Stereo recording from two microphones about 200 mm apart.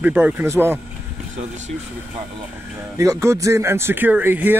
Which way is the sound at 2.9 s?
15° right (ahead or behind).